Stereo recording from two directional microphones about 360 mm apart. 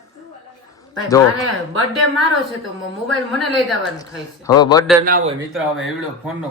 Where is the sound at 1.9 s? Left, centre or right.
Centre.